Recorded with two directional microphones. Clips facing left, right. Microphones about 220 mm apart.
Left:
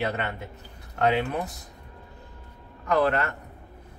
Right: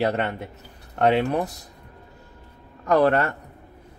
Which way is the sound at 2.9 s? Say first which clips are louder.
Right 5 dB; 40° right (ahead or behind).